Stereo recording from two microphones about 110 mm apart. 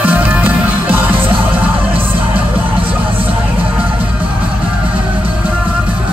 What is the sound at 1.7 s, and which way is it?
Music, 55° right (ahead or behind).